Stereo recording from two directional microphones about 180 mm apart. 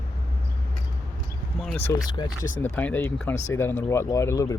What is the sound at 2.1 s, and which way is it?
Speech, 25° left (ahead or behind).